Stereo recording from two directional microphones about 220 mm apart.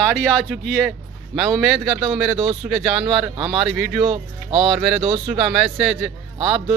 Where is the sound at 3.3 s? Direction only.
20° right (ahead or behind).